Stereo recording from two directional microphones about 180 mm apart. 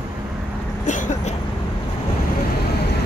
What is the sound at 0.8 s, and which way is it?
Vehicle, 45° left (ahead or behind).